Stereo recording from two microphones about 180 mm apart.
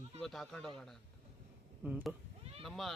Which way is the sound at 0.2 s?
Centre (ahead or behind).